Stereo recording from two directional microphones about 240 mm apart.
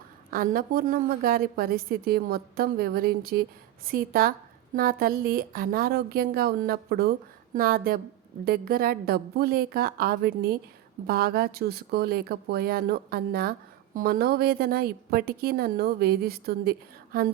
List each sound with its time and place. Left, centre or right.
0.3 s speech: right